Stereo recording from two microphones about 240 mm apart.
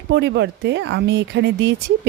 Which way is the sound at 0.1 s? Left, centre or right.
Right.